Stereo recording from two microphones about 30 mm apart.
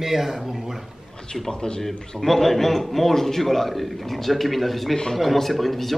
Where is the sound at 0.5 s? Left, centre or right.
Centre.